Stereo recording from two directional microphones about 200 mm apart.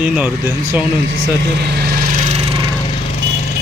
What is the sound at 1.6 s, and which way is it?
Vehicle, 55° right (ahead or behind).